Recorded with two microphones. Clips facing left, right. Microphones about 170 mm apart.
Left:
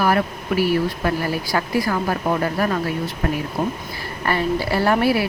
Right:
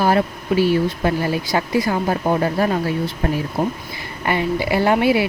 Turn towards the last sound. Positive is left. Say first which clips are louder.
# right 2 dB
turn(degrees=-20)  # may be behind; listen again after turning